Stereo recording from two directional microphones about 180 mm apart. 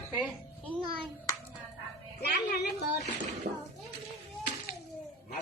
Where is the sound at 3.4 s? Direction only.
65° right (ahead or behind).